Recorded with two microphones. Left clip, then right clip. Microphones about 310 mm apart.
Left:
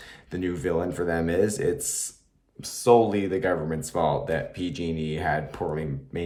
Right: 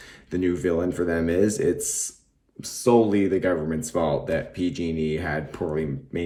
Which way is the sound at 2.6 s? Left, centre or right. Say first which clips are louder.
Right 1 dB; left.